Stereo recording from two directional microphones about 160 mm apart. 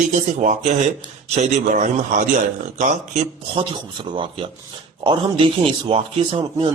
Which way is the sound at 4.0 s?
30° right (ahead or behind).